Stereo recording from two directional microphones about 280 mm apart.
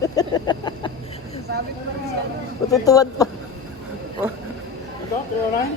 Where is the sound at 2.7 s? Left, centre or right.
Centre.